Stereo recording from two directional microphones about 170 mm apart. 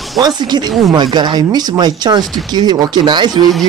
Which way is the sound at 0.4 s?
25° right (ahead or behind).